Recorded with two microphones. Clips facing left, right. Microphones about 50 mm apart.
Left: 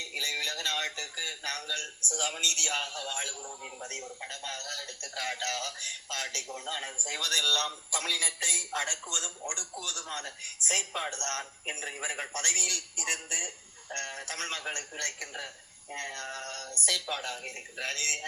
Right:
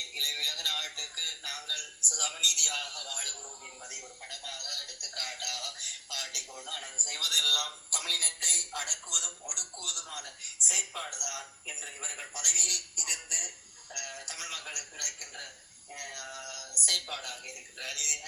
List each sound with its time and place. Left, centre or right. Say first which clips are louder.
0.1 s a sound: left 3 dB; left
1.2 s a man's voice: left 4 dB; left
5.3 s a man's voice: left 5 dB; left
15.9 s speech: left 5 dB; left